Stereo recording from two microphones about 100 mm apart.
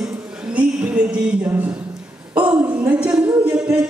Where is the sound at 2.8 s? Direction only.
15° right (ahead or behind).